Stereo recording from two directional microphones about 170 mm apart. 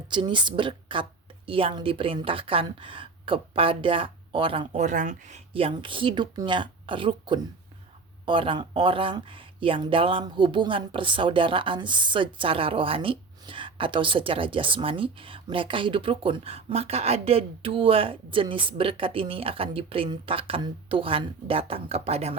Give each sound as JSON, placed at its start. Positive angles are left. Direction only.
{"t": 0.1, "sound": "speech", "side_deg": -30}
{"t": 4.8, "sound": "speech", "side_deg": -45}
{"t": 5.5, "sound": "speech", "side_deg": -30}